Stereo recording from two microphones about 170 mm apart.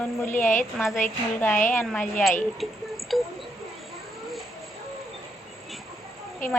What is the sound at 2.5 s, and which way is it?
Music, centre (ahead or behind).